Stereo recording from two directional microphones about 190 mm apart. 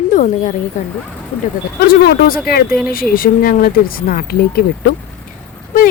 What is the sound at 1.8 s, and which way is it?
Speech, 55° left (ahead or behind).